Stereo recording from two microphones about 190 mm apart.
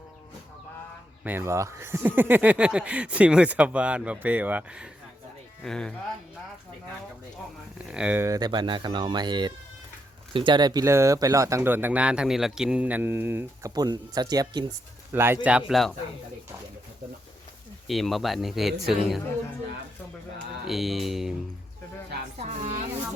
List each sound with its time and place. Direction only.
1.2 s speech: 10° right (ahead or behind)
7.8 s speech: 5° right (ahead or behind)
17.8 s speech: centre (ahead or behind)
20.7 s speech: centre (ahead or behind)
22.4 s music: 40° right (ahead or behind)